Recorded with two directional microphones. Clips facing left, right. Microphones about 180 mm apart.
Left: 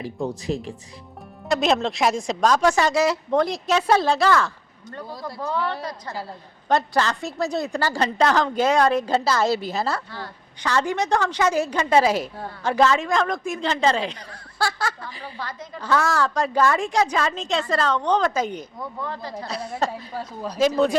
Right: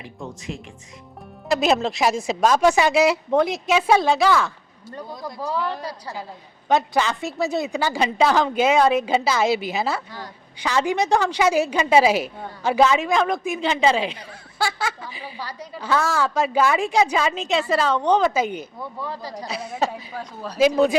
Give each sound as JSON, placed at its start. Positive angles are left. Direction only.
{"t": 0.0, "sound": "speech", "side_deg": 35}
{"t": 1.5, "sound": "a woman's voice", "side_deg": -5}
{"t": 9.0, "sound": "a woman's voice", "side_deg": -20}
{"t": 9.2, "sound": "a woman's voice", "side_deg": 0}
{"t": 20.1, "sound": "a woman's voice", "side_deg": 10}
{"t": 20.6, "sound": "speech", "side_deg": -10}